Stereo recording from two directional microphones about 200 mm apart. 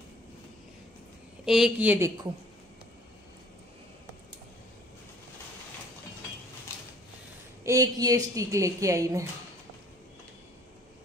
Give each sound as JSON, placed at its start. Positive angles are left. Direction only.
{"t": 1.4, "sound": "a woman's voice", "side_deg": 0}
{"t": 7.6, "sound": "a woman's voice", "side_deg": -15}